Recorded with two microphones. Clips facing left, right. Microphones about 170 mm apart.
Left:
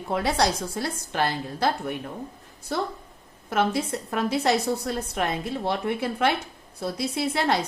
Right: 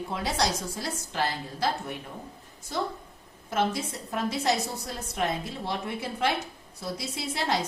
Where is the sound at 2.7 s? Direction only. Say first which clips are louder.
Left 3 dB; 60° left (ahead or behind).